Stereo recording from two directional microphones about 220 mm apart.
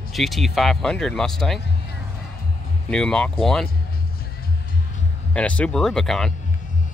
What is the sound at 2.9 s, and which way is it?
Speech, 5° left (ahead or behind).